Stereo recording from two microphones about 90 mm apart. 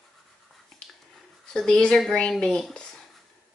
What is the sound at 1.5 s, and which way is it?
A woman's voice, 10° left (ahead or behind).